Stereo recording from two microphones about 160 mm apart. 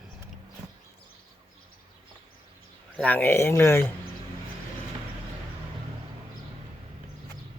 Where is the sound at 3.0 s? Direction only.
10° left (ahead or behind).